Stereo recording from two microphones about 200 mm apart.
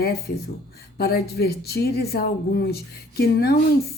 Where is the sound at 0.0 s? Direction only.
50° left (ahead or behind).